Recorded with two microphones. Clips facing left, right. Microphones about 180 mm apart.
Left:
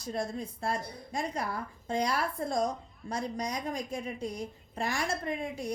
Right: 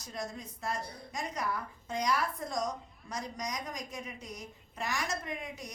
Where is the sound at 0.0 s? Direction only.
30° left (ahead or behind).